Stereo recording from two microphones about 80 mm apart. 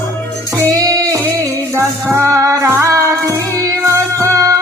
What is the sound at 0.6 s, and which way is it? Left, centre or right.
Music, right.